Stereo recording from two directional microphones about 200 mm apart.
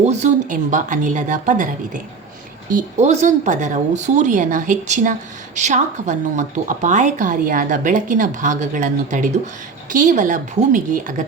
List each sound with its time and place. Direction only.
0.0 s a woman's voice: 35° right (ahead or behind)